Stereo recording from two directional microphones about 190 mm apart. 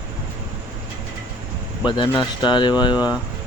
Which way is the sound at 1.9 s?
25° left (ahead or behind).